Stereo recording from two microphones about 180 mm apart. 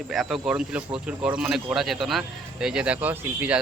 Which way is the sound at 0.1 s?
Centre (ahead or behind).